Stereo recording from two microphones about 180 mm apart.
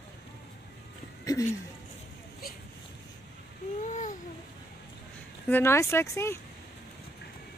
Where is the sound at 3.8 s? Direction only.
45° left (ahead or behind).